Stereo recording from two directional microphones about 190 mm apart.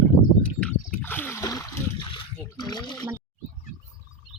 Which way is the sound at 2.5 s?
20° left (ahead or behind).